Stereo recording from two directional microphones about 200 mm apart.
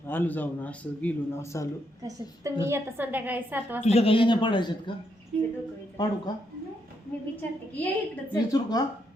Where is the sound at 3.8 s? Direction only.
30° left (ahead or behind).